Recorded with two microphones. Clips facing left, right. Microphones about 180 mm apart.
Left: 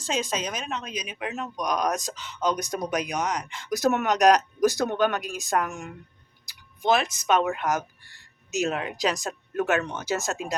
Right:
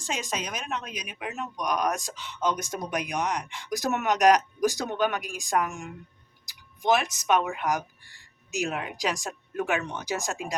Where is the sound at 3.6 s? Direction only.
15° right (ahead or behind).